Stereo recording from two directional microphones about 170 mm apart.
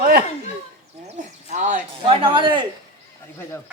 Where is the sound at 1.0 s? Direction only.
40° right (ahead or behind).